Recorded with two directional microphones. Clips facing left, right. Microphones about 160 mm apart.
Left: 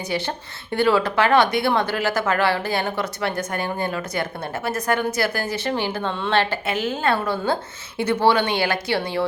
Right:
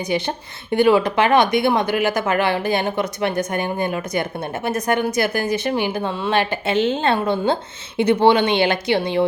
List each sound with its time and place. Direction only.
0.0 s a woman's voice: 15° right (ahead or behind)
6.7 s a woman's voice: 25° right (ahead or behind)